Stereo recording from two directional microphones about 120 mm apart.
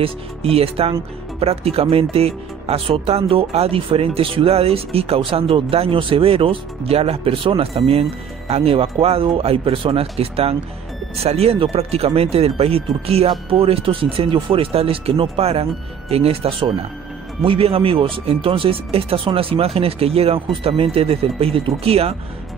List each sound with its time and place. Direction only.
0.0 s speech: 55° right (ahead or behind)